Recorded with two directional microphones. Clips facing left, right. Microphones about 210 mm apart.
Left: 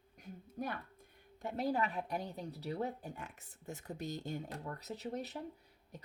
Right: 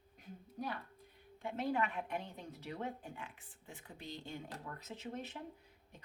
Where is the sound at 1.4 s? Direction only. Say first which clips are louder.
Left 1 dB; 40° left (ahead or behind).